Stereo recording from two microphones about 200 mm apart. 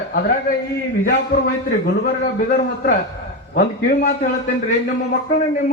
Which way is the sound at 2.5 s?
45° left (ahead or behind).